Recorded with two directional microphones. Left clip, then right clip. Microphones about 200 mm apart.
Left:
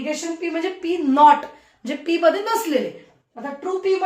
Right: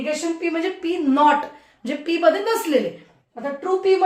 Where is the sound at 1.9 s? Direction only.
10° left (ahead or behind).